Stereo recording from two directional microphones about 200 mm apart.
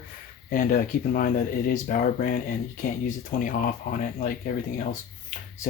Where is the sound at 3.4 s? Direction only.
45° left (ahead or behind).